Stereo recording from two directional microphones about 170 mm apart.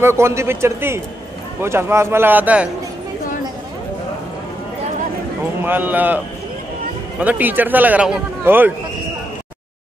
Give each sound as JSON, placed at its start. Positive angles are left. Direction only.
{"t": 0.0, "sound": "a man's voice", "side_deg": -15}
{"t": 5.6, "sound": "a man's voice", "side_deg": -10}